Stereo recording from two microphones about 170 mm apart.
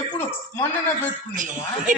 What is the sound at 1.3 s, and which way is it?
Speech, 50° right (ahead or behind).